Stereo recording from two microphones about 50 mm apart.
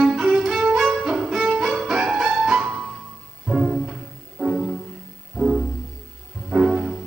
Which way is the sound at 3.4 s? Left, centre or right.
Right.